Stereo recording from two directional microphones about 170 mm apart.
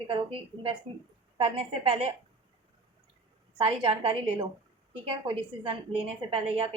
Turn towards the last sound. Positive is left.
turn(degrees=-35)  # may be behind; listen again after turning